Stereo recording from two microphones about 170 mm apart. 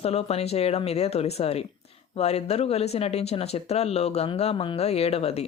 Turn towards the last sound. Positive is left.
turn(degrees=35)  # may be behind; listen again after turning